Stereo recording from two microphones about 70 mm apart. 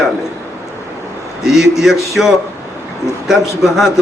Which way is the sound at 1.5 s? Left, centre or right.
Centre.